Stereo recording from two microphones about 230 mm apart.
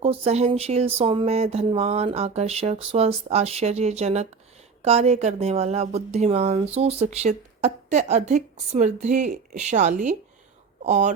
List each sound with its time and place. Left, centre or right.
0.0 s speech: right